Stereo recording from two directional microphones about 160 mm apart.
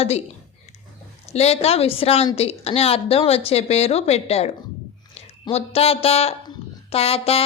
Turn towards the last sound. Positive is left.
turn(degrees=40)  # may be behind; listen again after turning